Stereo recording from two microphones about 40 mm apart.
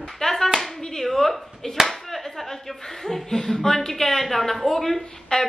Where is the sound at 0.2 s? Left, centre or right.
Centre.